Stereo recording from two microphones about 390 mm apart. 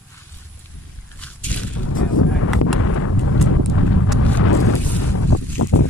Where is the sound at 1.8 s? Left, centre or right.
Left.